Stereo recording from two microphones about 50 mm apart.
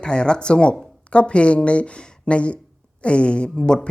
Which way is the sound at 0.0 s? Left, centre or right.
Centre.